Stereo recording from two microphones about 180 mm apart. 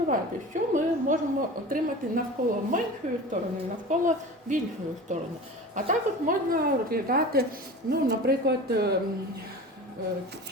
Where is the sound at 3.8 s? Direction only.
45° right (ahead or behind); by 9.0 s 65° right (ahead or behind).